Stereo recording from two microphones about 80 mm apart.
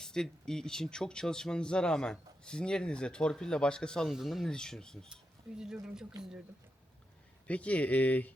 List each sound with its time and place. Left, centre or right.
0.0 s speech: centre
4.1 s speech: centre
5.5 s speech: centre
7.4 s speech: centre